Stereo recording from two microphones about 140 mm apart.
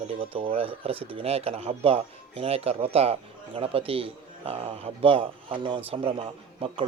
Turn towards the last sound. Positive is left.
turn(degrees=-40)  # may be behind; listen again after turning